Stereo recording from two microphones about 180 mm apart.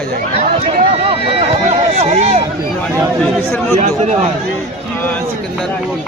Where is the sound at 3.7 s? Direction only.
40° right (ahead or behind).